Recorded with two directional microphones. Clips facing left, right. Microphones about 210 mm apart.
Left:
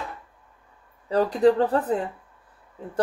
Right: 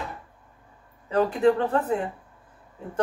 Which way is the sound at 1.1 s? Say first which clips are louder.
Left 2 dB; 35° left (ahead or behind).